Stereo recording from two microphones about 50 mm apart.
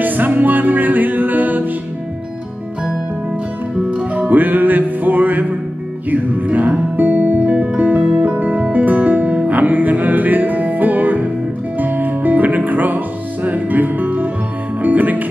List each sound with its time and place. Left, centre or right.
0.0 s music: right
4.3 s music: right